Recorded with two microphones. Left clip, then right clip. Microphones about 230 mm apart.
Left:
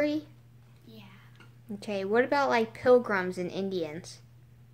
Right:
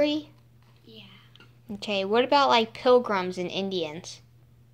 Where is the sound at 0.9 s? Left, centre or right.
Centre.